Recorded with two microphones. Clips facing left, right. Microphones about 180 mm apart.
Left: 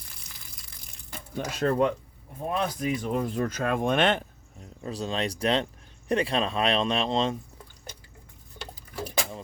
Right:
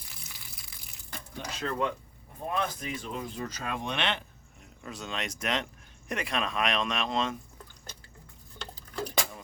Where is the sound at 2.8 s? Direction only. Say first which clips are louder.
Left 9 dB; 45° left (ahead or behind).